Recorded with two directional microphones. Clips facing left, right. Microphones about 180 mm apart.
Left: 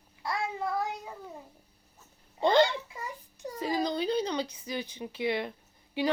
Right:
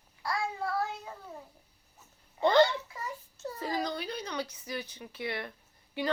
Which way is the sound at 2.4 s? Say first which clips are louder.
Even; 15° left (ahead or behind).